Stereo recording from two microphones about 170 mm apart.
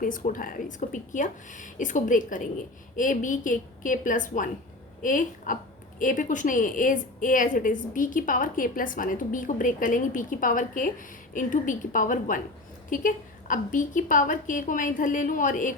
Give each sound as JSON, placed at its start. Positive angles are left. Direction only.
{"t": 0.0, "sound": "a woman's voice", "side_deg": 50}